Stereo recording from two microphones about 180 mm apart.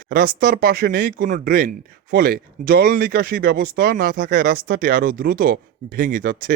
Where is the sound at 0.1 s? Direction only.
55° right (ahead or behind).